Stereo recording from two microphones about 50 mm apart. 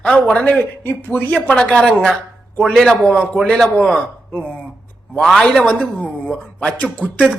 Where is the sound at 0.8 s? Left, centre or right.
Left.